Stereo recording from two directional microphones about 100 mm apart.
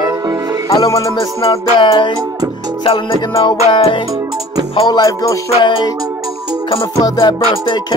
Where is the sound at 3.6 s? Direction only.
65° left (ahead or behind).